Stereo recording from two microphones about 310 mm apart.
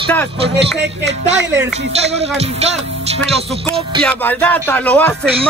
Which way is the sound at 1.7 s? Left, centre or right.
Centre.